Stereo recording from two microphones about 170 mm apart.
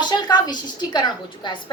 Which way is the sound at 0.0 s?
25° left (ahead or behind).